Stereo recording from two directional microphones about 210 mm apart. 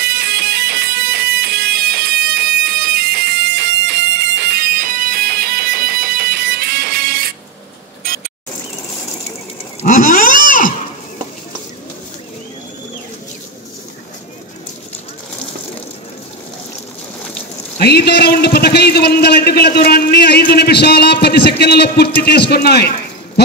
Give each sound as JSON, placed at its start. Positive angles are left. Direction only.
{"t": 0.0, "sound": "music", "side_deg": -50}
{"t": 9.8, "sound": "a sound", "side_deg": 35}
{"t": 17.7, "sound": "a man's voice", "side_deg": 50}